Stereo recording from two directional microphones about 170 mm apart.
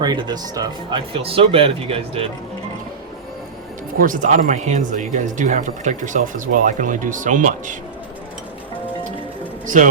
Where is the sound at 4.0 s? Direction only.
50° right (ahead or behind).